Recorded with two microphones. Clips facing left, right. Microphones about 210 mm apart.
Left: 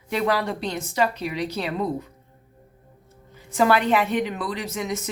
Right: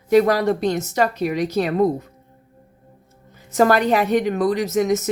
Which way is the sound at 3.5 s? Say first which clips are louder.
Right 3 dB; 45° right (ahead or behind).